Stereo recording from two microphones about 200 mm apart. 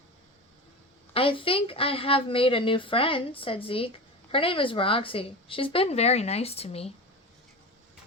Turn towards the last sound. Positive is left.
turn(degrees=30)  # may be behind; listen again after turning